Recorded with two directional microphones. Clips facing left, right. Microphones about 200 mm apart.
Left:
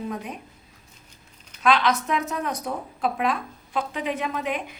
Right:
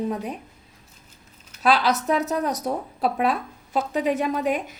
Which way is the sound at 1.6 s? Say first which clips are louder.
Right 1 dB; 35° right (ahead or behind).